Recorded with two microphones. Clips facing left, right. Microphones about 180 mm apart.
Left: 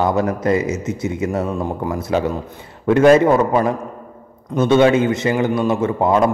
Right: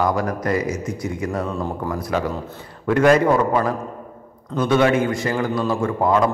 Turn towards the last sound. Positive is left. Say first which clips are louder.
# left 3 dB
turn(degrees=25)  # may be behind; listen again after turning